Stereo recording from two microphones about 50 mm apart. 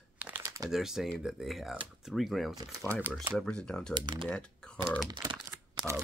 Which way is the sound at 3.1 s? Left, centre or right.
Right.